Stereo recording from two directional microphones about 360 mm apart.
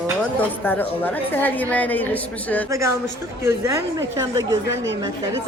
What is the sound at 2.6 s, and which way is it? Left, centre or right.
A woman's voice, centre.